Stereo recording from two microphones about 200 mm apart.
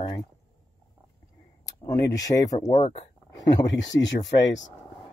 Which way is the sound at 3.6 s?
65° left (ahead or behind).